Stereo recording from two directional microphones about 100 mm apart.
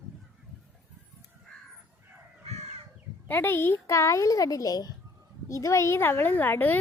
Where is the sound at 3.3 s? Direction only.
20° left (ahead or behind).